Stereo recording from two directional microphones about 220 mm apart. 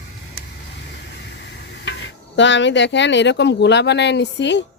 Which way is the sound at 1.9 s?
50° left (ahead or behind).